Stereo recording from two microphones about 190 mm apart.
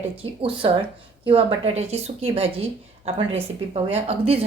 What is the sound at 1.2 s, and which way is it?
A woman's voice, 30° right (ahead or behind).